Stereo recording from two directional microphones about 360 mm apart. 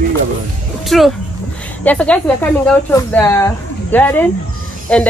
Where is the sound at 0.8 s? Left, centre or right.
Centre.